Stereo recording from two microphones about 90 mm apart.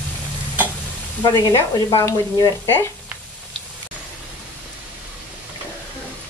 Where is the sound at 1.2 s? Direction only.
50° left (ahead or behind).